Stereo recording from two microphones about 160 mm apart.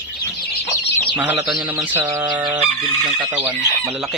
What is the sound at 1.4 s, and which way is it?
Speech, 5° right (ahead or behind).